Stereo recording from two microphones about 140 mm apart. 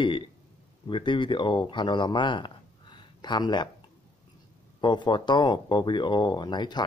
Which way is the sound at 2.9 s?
30° left (ahead or behind).